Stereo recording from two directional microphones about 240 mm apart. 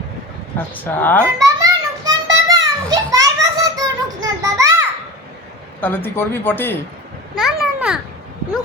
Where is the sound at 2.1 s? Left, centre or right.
Centre.